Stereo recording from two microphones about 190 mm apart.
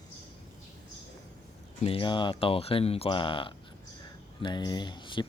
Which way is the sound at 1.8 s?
25° left (ahead or behind).